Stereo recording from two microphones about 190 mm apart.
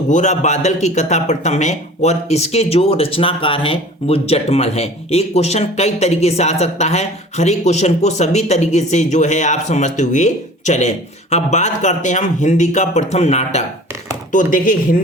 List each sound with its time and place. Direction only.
0.1 s a man's voice: 40° left (ahead or behind)